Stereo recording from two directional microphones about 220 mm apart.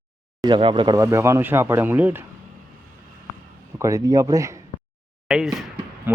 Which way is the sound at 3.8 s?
15° right (ahead or behind).